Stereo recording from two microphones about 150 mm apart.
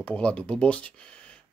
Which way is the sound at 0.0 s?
10° left (ahead or behind).